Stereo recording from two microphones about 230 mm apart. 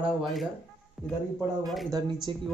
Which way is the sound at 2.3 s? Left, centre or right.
Right.